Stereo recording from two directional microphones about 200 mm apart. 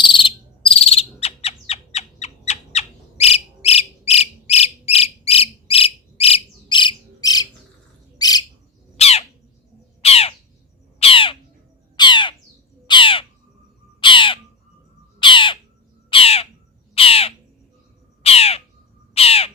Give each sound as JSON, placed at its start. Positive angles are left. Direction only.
{"t": 0.0, "sound": "cricket", "side_deg": 25}
{"t": 2.2, "sound": "a sound", "side_deg": 35}
{"t": 8.2, "sound": "bird", "side_deg": 20}
{"t": 9.0, "sound": "squawk", "side_deg": 30}
{"t": 11.0, "sound": "crow", "side_deg": 25}
{"t": 11.9, "sound": "squawk", "side_deg": 25}
{"t": 12.9, "sound": "crow", "side_deg": 25}
{"t": 14.0, "sound": "bird", "side_deg": 25}
{"t": 15.2, "sound": "crow", "side_deg": 25}
{"t": 16.0, "sound": "bird", "side_deg": 30}
{"t": 19.1, "sound": "owl", "side_deg": 30}